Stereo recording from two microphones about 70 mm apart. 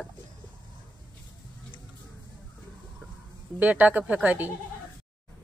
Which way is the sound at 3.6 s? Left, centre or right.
Right.